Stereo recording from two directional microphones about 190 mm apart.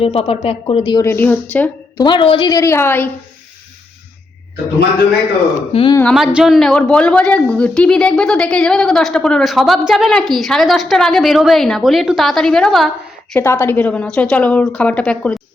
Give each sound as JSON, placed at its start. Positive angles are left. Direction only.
{"t": 0.0, "sound": "speech", "side_deg": 30}
{"t": 1.0, "sound": "a woman's voice", "side_deg": 10}
{"t": 2.0, "sound": "a woman's voice", "side_deg": 25}
{"t": 5.7, "sound": "a woman's voice", "side_deg": 25}
{"t": 6.0, "sound": "a woman's voice", "side_deg": 0}